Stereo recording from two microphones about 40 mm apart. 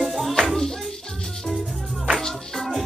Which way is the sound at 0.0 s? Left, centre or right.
Centre.